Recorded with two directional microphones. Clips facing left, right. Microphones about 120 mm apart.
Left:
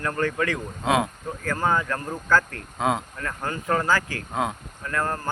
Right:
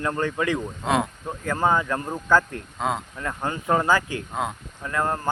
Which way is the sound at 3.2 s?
15° right (ahead or behind).